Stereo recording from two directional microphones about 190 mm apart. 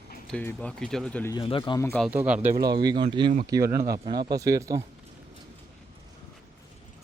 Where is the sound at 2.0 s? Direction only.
5° right (ahead or behind).